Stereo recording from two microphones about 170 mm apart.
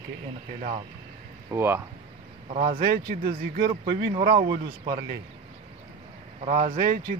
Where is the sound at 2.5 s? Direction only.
60° right (ahead or behind).